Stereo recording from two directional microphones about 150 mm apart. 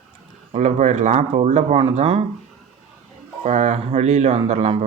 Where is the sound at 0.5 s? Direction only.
50° right (ahead or behind).